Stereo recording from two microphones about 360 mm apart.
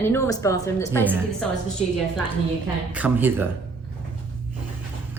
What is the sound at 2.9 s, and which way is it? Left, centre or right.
Speech, centre.